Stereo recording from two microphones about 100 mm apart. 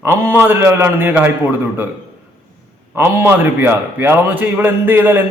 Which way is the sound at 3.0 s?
20° right (ahead or behind).